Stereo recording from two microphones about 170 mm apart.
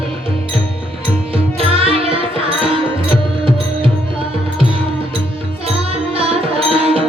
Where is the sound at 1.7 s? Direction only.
35° right (ahead or behind).